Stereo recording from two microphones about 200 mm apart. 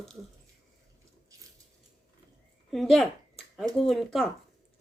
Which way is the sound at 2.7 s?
Centre (ahead or behind).